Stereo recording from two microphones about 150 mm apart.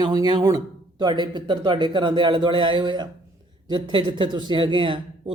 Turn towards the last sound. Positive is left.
turn(degrees=-35)  # may be behind; listen again after turning